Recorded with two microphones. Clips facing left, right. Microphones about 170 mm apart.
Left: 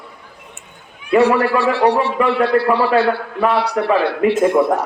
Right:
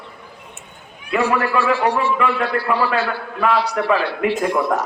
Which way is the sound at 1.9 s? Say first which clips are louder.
Left 3 dB; 65° left (ahead or behind).